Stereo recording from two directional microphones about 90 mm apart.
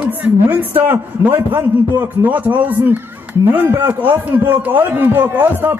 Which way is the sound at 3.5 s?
20° right (ahead or behind).